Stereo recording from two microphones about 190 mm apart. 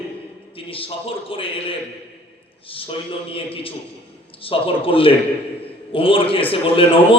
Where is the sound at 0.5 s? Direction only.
30° left (ahead or behind).